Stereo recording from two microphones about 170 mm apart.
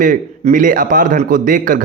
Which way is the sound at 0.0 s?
55° right (ahead or behind).